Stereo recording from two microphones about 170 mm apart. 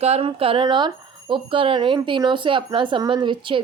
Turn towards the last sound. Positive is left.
turn(degrees=-30)  # may be behind; listen again after turning